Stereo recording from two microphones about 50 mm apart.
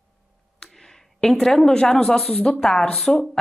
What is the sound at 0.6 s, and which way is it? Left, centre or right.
Speech, centre.